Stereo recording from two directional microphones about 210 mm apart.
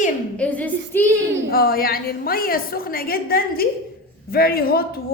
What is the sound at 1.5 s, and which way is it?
A woman's voice, 45° left (ahead or behind).